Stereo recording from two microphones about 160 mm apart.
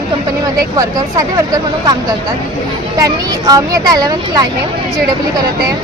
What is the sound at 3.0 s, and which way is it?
Speech, 25° right (ahead or behind).